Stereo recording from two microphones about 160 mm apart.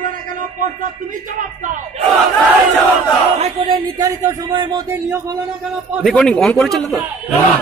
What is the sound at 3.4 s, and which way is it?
Chant, 35° right (ahead or behind).